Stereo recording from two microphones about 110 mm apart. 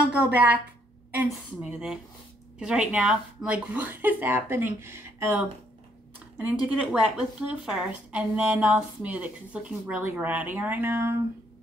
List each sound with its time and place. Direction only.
0.1 s speech: 15° right (ahead or behind)